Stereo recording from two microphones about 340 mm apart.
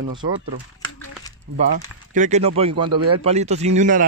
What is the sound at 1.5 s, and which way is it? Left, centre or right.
Speech, right.